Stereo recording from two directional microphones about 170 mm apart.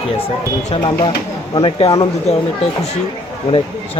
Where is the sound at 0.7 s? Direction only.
30° left (ahead or behind).